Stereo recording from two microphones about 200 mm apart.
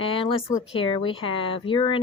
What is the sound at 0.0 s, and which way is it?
Speech, 25° left (ahead or behind).